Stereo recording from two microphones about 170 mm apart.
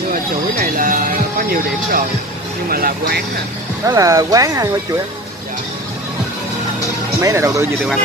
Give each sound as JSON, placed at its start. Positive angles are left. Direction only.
{"t": 0.1, "sound": "music", "side_deg": -55}
{"t": 2.7, "sound": "speech", "side_deg": -60}
{"t": 3.8, "sound": "speech", "side_deg": -20}
{"t": 7.2, "sound": "speech", "side_deg": -15}